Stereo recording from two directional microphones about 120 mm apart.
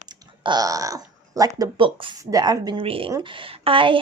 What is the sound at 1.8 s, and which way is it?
Speech, 45° right (ahead or behind).